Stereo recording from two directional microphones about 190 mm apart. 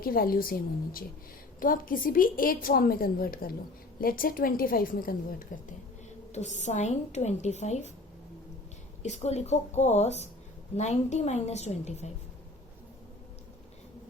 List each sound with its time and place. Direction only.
0.0 s a woman's voice: 50° left (ahead or behind)
1.5 s a woman's voice: 45° left (ahead or behind)
9.0 s a woman's voice: 35° left (ahead or behind)